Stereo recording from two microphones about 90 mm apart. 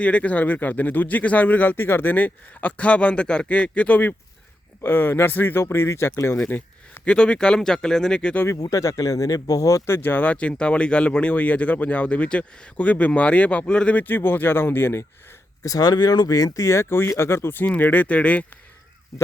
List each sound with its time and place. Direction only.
0.0 s speech: 15° left (ahead or behind); by 6.3 s 30° left (ahead or behind)
6.5 s speech: 15° left (ahead or behind)
8.7 s speech: 40° left (ahead or behind)
15.6 s speech: 45° left (ahead or behind); by 18.4 s 15° left (ahead or behind)